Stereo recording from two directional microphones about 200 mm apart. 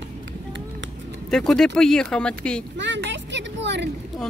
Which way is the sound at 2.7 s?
65° right (ahead or behind).